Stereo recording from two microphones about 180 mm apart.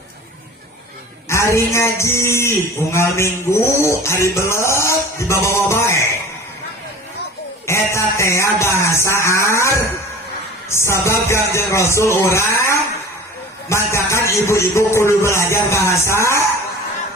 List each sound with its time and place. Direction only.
1.3 s speech: 15° left (ahead or behind)
7.7 s speech: 15° left (ahead or behind)